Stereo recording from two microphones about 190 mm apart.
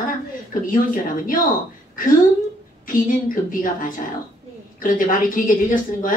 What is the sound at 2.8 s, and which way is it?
A woman's voice, 45° left (ahead or behind).